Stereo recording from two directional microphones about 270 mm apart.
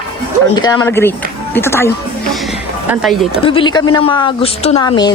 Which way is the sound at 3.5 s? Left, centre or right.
Centre.